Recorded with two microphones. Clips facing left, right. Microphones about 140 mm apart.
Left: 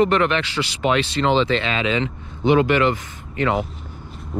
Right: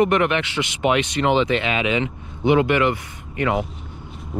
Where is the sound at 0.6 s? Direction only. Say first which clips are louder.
Right 1 dB; 30° left (ahead or behind).